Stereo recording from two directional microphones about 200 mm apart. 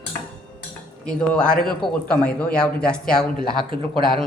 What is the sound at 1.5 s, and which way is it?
Speech, 5° left (ahead or behind).